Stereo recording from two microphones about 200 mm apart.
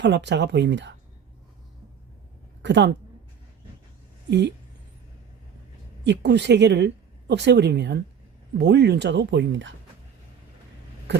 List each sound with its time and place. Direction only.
0.0 s a woman's voice: 60° right (ahead or behind)
2.6 s a woman's voice: 60° right (ahead or behind)
4.3 s a woman's voice: 60° right (ahead or behind)
6.1 s a woman's voice: 60° right (ahead or behind)